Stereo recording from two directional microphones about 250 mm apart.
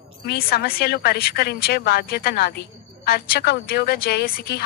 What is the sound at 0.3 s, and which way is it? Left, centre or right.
Speech, left.